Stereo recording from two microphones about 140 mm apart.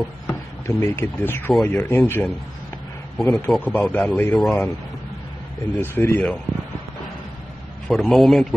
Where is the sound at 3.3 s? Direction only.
10° left (ahead or behind).